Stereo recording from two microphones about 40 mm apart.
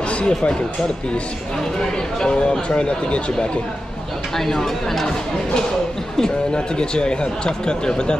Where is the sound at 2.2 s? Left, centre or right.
Left.